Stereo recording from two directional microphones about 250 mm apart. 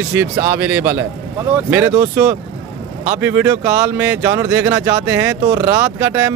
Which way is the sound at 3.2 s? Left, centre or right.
Centre.